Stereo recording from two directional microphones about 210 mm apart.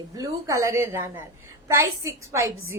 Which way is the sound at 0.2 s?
15° right (ahead or behind).